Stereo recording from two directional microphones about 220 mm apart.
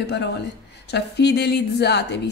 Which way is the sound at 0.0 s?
50° left (ahead or behind).